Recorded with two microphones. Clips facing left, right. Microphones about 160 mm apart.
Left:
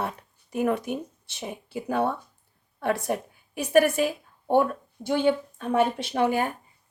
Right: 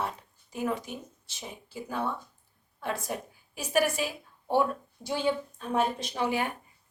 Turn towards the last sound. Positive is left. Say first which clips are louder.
# left 5 dB
turn(degrees=45)  # may be behind; listen again after turning